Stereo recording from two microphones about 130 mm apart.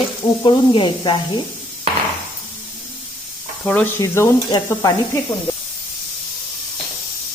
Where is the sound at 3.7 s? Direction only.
10° left (ahead or behind).